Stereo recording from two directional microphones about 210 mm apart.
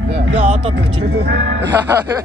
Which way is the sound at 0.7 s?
55° right (ahead or behind).